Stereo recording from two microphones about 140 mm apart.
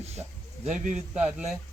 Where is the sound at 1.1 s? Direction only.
5° right (ahead or behind).